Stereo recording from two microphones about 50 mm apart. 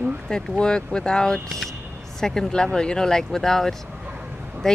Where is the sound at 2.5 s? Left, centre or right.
Centre.